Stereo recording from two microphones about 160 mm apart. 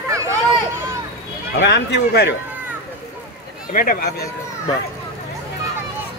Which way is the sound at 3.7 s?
65° left (ahead or behind).